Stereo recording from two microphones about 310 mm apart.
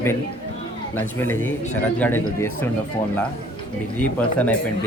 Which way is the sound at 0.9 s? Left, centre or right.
Centre.